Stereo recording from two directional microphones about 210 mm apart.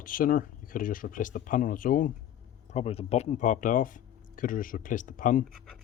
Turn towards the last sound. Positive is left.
turn(degrees=40)  # may be behind; listen again after turning